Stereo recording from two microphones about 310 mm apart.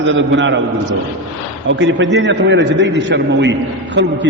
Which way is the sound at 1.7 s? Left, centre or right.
Right.